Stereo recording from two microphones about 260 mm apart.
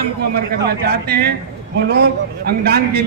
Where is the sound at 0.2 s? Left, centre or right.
Right.